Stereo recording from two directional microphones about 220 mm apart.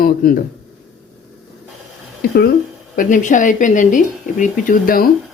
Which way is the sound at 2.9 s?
35° left (ahead or behind).